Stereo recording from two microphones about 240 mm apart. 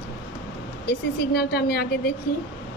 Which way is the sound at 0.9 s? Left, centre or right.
Left.